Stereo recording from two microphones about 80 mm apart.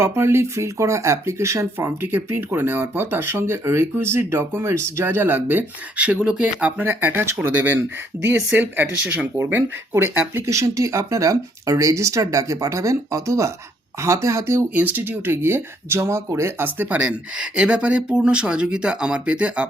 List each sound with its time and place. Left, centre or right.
0.0 s speech: right
2.1 s speech: right
9.9 s speech: right
14.7 s speech: right